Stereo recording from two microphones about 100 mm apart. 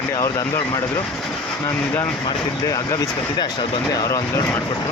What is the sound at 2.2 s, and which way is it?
Speech, 40° left (ahead or behind).